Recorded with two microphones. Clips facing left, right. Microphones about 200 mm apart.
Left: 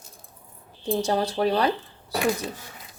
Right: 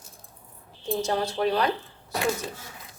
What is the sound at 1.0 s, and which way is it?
Speech, 35° left (ahead or behind).